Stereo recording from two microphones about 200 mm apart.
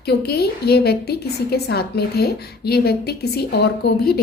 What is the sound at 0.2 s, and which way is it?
A woman's voice, 55° left (ahead or behind).